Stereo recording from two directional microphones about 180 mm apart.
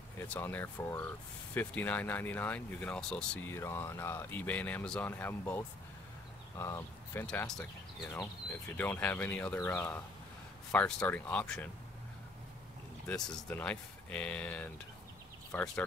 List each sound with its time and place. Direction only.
0.2 s speech: 10° left (ahead or behind)
7.2 s speech: 5° left (ahead or behind)
8.7 s speech: 10° left (ahead or behind)
13.0 s speech: 5° left (ahead or behind)